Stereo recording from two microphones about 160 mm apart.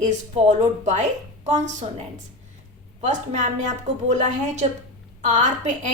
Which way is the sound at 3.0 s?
45° right (ahead or behind).